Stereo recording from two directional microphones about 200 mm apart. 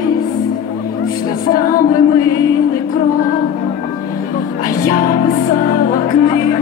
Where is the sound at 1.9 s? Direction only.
15° left (ahead or behind).